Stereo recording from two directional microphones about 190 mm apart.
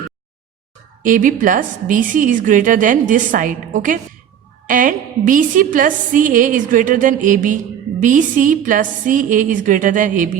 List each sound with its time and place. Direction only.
1.0 s a woman's voice: 45° right (ahead or behind)